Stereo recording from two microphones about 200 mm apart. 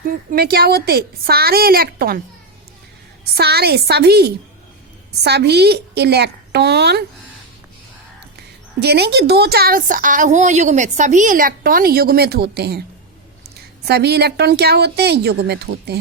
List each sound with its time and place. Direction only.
0.3 s a woman's voice: 50° right (ahead or behind)
3.3 s a woman's voice: 55° right (ahead or behind)
8.8 s a woman's voice: 55° right (ahead or behind)
13.8 s a woman's voice: 55° right (ahead or behind)